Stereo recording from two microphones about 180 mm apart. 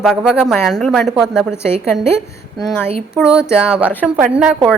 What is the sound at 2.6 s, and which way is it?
Speech, 10° left (ahead or behind).